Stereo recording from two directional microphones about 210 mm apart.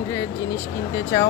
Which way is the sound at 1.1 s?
15° left (ahead or behind).